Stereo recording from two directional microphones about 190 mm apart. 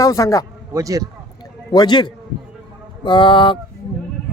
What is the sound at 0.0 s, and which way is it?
Speech, 15° left (ahead or behind).